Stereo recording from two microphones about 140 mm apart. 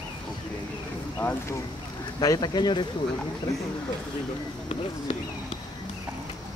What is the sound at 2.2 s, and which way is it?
Speech, 30° left (ahead or behind).